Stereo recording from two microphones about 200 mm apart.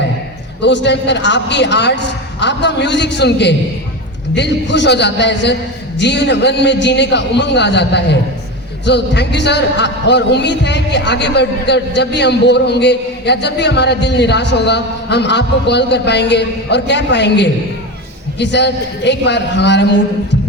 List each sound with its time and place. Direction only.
0.6 s a man's voice: 60° left (ahead or behind)